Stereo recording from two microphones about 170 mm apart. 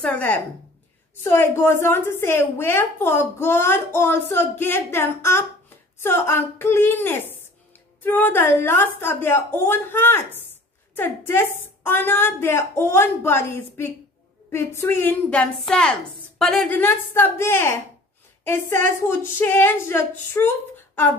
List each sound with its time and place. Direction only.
0.0 s a woman's voice: 10° left (ahead or behind)